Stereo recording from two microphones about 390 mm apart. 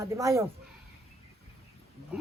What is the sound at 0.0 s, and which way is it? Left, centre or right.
Speech, centre.